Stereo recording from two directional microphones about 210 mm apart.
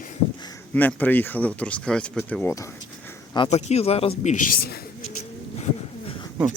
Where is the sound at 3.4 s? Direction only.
30° left (ahead or behind).